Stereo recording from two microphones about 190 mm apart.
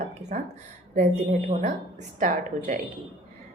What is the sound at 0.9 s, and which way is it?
A woman's voice, 40° right (ahead or behind).